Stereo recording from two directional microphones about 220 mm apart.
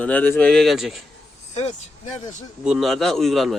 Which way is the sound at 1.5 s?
30° left (ahead or behind).